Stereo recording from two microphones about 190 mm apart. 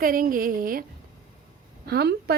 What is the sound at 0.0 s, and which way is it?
Speech, 50° right (ahead or behind).